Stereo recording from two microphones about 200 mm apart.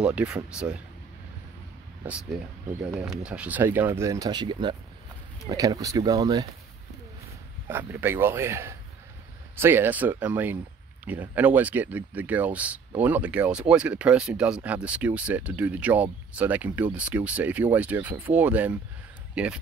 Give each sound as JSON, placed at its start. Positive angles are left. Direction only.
{"t": 0.0, "sound": "speech", "side_deg": -5}
{"t": 3.3, "sound": "speech", "side_deg": -5}
{"t": 7.6, "sound": "speech", "side_deg": -10}